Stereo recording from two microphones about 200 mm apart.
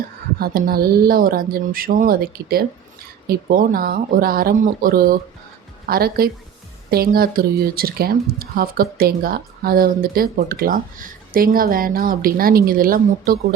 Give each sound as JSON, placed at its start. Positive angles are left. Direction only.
{"t": 0.3, "sound": "speech", "side_deg": -50}